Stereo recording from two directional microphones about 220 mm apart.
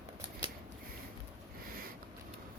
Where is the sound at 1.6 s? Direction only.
40° right (ahead or behind).